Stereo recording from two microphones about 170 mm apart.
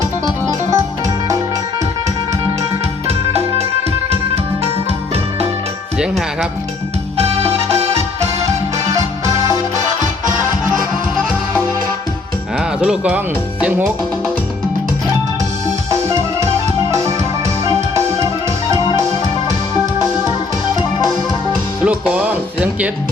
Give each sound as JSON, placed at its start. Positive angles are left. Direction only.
{"t": 0.0, "sound": "music", "side_deg": -20}
{"t": 6.0, "sound": "speech", "side_deg": -5}
{"t": 7.2, "sound": "music", "side_deg": -35}
{"t": 8.9, "sound": "music", "side_deg": -20}
{"t": 12.5, "sound": "speech", "side_deg": -5}
{"t": 15.9, "sound": "music", "side_deg": -20}
{"t": 17.7, "sound": "music", "side_deg": -20}
{"t": 21.8, "sound": "music", "side_deg": -10}